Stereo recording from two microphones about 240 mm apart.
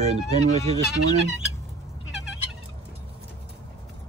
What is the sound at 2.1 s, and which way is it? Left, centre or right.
Fowl, centre.